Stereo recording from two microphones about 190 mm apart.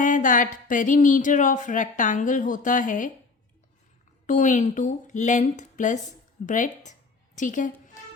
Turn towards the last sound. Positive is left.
turn(degrees=45)  # may be behind; listen again after turning